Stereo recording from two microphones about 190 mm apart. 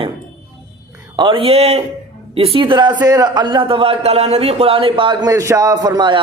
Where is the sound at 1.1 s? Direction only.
25° right (ahead or behind).